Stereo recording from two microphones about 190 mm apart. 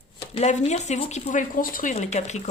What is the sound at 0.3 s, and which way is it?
Speech, 35° left (ahead or behind).